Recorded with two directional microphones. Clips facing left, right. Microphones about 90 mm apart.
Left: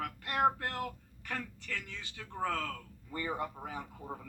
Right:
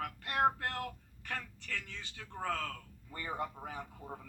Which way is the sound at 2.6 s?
15° left (ahead or behind).